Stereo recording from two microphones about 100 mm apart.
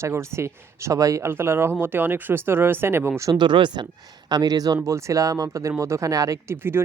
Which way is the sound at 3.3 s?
50° right (ahead or behind).